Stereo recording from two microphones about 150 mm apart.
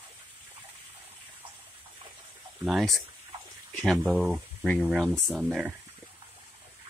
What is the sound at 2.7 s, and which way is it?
Speech, centre (ahead or behind).